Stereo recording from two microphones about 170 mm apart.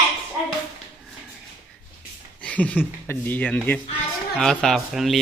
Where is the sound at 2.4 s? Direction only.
10° left (ahead or behind).